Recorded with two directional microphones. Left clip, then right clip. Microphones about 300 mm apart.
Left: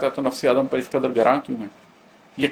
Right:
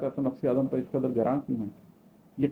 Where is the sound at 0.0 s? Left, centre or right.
Centre.